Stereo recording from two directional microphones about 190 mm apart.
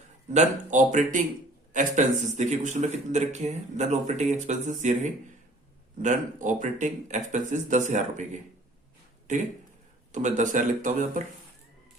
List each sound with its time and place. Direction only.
0.3 s speech: 40° right (ahead or behind)